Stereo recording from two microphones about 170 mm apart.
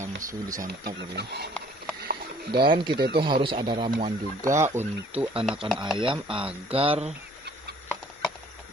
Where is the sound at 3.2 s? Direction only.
30° right (ahead or behind).